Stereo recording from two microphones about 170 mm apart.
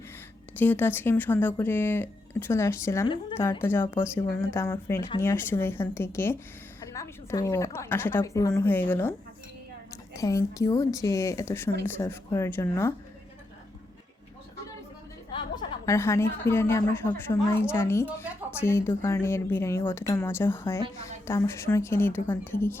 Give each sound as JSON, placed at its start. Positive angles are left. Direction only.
{"t": 0.5, "sound": "speech", "side_deg": 10}
{"t": 10.2, "sound": "speech", "side_deg": 20}
{"t": 15.3, "sound": "a woman's voice", "side_deg": 25}